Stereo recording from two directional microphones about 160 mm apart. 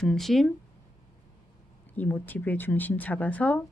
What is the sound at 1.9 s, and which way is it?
Speech, 10° left (ahead or behind).